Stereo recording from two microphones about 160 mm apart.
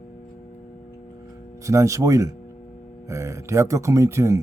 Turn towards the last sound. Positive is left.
turn(degrees=-20)  # may be behind; listen again after turning